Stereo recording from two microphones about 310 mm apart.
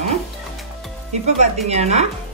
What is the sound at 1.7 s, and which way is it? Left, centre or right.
Speech, right.